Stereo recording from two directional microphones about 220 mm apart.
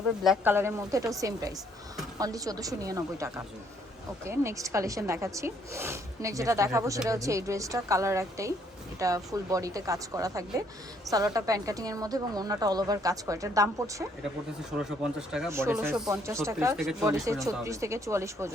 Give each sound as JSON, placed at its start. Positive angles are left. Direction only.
{"t": 0.2, "sound": "a woman's voice", "side_deg": -5}
{"t": 14.8, "sound": "a woman's voice", "side_deg": -5}